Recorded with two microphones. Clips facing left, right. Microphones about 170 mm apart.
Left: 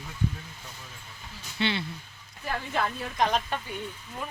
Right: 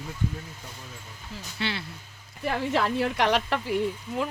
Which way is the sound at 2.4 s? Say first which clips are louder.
Right 5 dB; 80° right.